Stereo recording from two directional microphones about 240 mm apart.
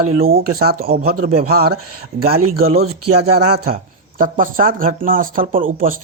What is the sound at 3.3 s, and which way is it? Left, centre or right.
Speech, right.